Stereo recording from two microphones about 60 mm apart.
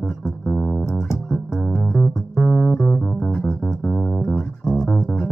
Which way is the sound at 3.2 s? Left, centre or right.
Centre.